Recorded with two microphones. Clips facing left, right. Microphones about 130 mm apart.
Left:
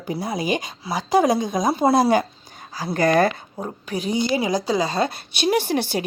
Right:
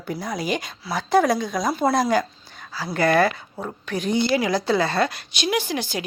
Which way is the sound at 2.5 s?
45° left (ahead or behind).